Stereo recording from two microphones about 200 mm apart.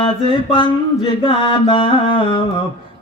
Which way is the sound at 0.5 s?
25° left (ahead or behind).